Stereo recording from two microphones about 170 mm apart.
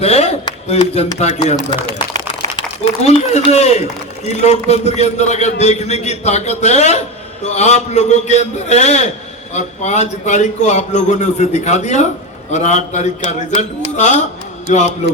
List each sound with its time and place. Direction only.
0.0 s a sound: 40° left (ahead or behind)
0.7 s a man's voice: 40° left (ahead or behind)
3.1 s a man's voice: 40° left (ahead or behind)